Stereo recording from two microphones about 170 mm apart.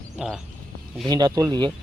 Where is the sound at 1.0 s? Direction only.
25° right (ahead or behind).